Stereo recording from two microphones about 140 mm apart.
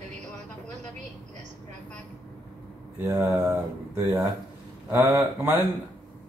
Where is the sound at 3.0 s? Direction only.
25° right (ahead or behind).